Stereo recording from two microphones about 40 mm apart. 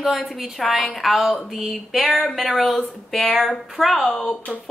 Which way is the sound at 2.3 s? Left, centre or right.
Centre.